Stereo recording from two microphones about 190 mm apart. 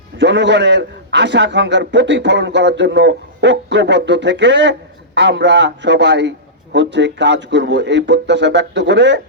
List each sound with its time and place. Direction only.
0.2 s a man's voice: 65° right (ahead or behind)